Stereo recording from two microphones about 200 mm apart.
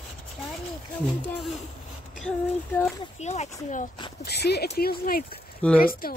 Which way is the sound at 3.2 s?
35° left (ahead or behind).